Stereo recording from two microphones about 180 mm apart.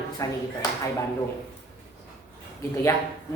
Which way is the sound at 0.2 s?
20° left (ahead or behind).